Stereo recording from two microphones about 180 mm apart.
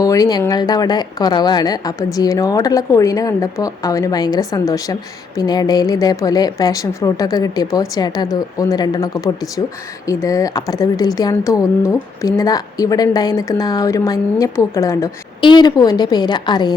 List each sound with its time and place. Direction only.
0.0 s speech: 20° left (ahead or behind)